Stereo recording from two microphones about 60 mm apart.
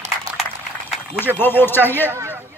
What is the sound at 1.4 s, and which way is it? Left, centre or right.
Speech, left.